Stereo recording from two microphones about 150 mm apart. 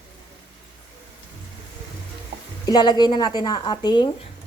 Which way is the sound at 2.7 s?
30° left (ahead or behind).